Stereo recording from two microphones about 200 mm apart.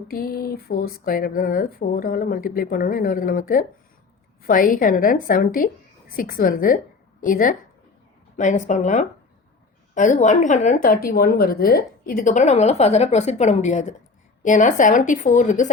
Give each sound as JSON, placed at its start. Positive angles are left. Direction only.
{"t": 0.1, "sound": "a woman's voice", "side_deg": 45}